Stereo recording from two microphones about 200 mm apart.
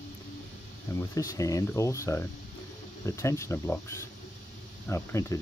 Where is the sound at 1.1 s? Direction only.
15° left (ahead or behind).